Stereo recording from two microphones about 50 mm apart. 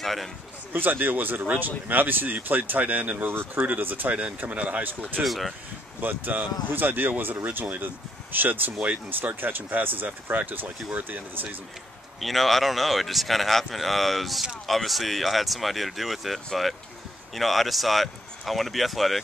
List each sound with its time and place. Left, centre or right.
0.0 s a man's voice: centre
0.7 s speech: right
5.2 s speech: centre
5.9 s speech: right
12.2 s speech: centre